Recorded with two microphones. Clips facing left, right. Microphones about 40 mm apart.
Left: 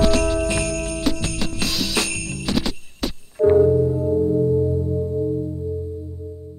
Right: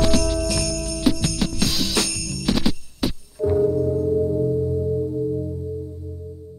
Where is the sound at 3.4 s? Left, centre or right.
Left.